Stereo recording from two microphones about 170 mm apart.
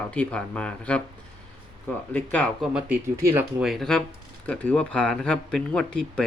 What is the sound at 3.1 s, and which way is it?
Speech, 15° right (ahead or behind).